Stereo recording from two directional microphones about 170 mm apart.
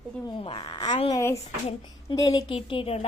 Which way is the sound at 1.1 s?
15° left (ahead or behind).